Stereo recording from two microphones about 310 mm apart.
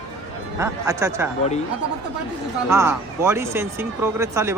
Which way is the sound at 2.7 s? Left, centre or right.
Centre.